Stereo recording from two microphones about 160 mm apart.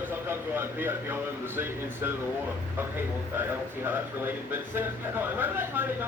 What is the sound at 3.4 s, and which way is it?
Speech, 15° right (ahead or behind).